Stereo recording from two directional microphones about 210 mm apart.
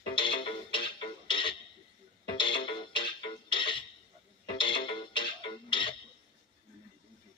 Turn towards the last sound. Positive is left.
turn(degrees=25)  # may be behind; listen again after turning